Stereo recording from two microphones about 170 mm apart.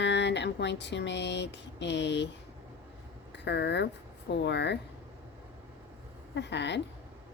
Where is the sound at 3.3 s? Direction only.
90° left.